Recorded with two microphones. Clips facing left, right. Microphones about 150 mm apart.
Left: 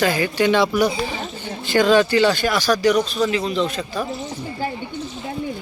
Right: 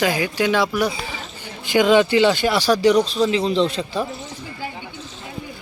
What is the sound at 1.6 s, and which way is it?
Speech, 15° right (ahead or behind).